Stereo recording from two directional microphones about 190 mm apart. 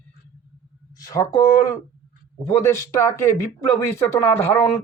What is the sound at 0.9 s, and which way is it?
Speech, 20° left (ahead or behind).